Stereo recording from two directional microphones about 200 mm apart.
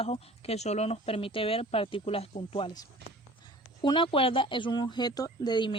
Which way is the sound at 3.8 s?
25° left (ahead or behind).